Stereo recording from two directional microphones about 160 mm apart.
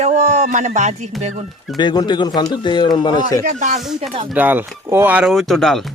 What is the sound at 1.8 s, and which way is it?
Speech, 30° left (ahead or behind).